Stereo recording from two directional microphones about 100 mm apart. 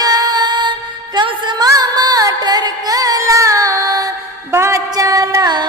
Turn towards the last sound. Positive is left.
turn(degrees=-45)  # may be behind; listen again after turning